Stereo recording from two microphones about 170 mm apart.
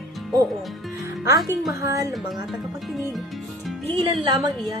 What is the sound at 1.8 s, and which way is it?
Speech, 20° right (ahead or behind).